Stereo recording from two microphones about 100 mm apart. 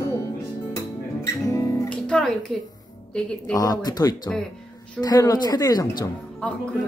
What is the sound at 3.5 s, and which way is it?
Speech, 40° left (ahead or behind).